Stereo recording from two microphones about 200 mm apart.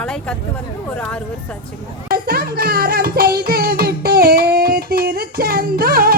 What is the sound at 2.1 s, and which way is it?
Music, 50° right (ahead or behind).